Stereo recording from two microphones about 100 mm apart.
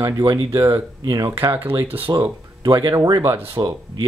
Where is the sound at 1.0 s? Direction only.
40° right (ahead or behind).